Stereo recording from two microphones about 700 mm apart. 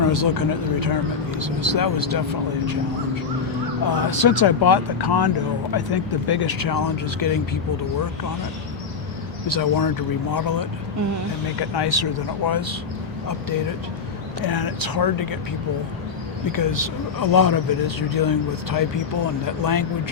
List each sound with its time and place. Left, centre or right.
0.0 s speech: left
3.8 s speech: left
9.5 s speech: left
11.8 s speech: left
14.4 s speech: left
16.5 s speech: left